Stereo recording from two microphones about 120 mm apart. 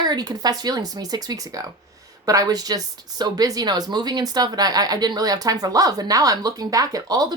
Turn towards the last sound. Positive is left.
turn(degrees=-30)  # may be behind; listen again after turning